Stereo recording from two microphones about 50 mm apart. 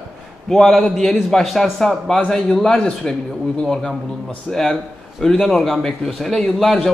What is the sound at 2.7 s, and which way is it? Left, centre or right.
A man's voice, centre.